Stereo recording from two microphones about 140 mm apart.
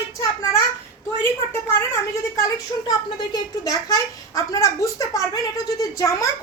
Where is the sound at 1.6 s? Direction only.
20° left (ahead or behind).